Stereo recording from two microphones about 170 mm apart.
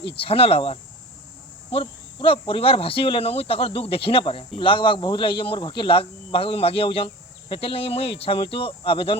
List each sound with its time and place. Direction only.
0.2 s speech: 35° left (ahead or behind)